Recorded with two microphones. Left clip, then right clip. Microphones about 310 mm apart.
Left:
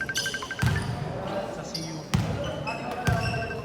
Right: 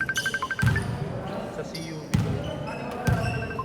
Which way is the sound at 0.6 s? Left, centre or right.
Centre.